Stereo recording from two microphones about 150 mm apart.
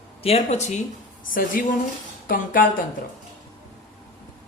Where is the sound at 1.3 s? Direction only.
65° left (ahead or behind).